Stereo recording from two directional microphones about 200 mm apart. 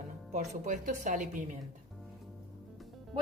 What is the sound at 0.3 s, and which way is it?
A woman's voice, 40° right (ahead or behind).